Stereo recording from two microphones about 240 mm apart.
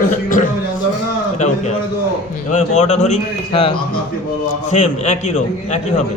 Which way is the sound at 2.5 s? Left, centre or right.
Left.